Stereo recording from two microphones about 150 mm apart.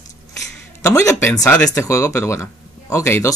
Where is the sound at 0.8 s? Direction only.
20° left (ahead or behind).